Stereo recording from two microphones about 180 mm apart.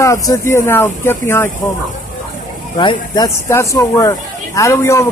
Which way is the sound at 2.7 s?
25° left (ahead or behind).